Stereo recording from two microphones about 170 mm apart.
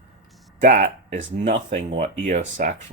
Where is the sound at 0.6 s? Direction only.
50° right (ahead or behind).